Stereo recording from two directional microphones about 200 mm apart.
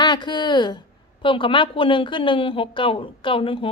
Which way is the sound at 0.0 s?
20° left (ahead or behind).